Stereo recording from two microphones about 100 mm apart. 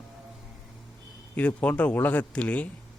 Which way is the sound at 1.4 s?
15° left (ahead or behind).